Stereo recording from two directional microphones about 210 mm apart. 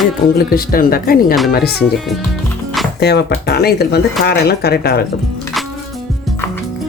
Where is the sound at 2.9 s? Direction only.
50° left (ahead or behind).